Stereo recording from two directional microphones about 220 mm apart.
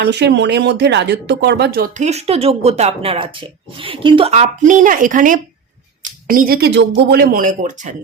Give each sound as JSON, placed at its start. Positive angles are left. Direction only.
{"t": 0.0, "sound": "speech", "side_deg": -50}